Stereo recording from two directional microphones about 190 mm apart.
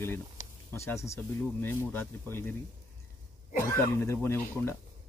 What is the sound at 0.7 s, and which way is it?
Speech, 15° left (ahead or behind).